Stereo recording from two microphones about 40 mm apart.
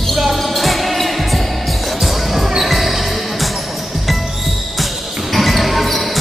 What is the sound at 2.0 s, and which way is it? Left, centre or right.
Basketball bounce, centre.